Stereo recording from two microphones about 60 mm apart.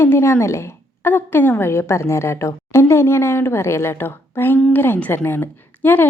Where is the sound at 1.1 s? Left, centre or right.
Left.